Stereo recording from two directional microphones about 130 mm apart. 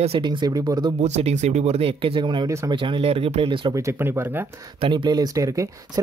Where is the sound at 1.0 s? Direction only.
60° right (ahead or behind); by 3.7 s 40° right (ahead or behind).